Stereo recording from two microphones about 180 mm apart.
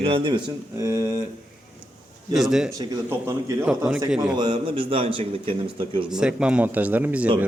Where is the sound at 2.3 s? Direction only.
Centre (ahead or behind).